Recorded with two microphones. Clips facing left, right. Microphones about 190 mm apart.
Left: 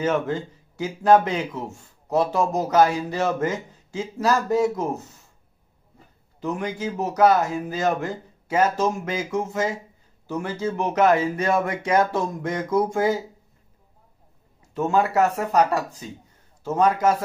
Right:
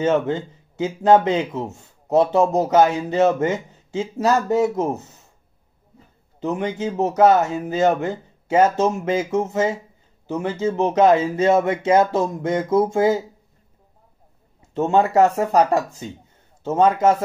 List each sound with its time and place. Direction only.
0.0 s speech: 25° right (ahead or behind)
6.4 s speech: 25° right (ahead or behind)
14.7 s speech: 25° right (ahead or behind)